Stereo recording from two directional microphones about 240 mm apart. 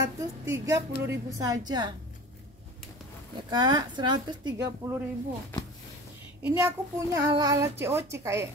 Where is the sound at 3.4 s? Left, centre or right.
Centre.